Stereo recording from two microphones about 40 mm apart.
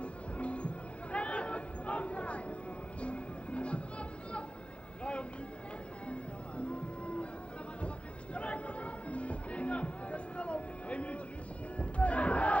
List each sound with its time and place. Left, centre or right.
0.0 s music: left
6.0 s music: left
8.4 s music: left